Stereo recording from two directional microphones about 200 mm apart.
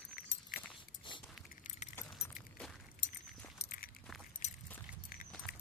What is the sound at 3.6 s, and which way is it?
Walk, 45° left (ahead or behind).